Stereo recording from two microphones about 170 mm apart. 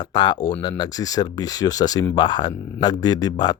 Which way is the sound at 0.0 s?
25° left (ahead or behind).